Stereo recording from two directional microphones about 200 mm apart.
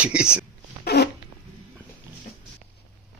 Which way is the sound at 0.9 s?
55° left (ahead or behind).